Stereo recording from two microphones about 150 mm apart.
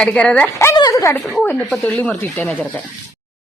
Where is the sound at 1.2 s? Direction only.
Centre (ahead or behind).